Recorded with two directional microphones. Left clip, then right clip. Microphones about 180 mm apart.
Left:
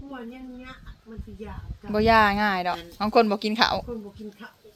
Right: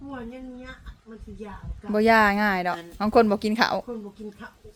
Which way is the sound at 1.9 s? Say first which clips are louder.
Even; 25° right (ahead or behind).